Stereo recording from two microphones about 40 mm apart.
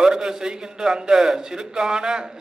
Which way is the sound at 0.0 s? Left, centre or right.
Centre.